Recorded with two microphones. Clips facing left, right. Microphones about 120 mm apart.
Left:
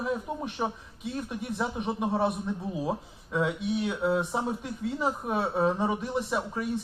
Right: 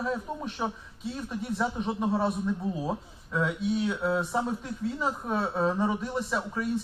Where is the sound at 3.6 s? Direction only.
70° left (ahead or behind).